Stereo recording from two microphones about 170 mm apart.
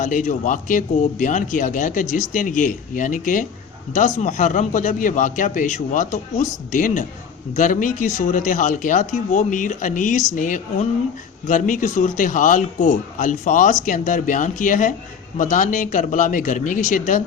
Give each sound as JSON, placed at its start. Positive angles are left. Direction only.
{"t": 0.0, "sound": "speech", "side_deg": 50}